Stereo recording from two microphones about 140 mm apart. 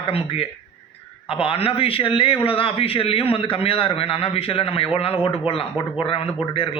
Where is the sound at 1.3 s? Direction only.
40° left (ahead or behind).